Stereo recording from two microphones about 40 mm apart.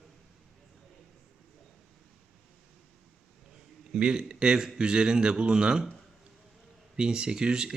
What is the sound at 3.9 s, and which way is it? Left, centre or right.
Speech, right.